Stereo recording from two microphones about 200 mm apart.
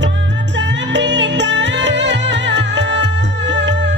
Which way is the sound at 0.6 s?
60° right (ahead or behind).